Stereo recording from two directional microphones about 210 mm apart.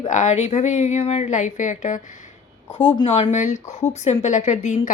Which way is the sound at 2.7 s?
25° left (ahead or behind).